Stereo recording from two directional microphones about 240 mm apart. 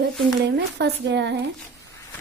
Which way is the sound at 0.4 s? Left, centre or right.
Right.